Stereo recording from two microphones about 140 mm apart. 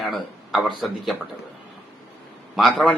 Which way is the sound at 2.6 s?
Centre (ahead or behind).